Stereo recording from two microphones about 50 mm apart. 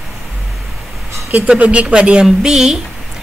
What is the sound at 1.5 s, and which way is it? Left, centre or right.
Speech, right.